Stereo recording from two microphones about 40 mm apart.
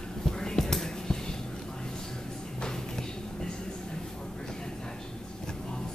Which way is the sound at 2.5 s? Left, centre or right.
Centre.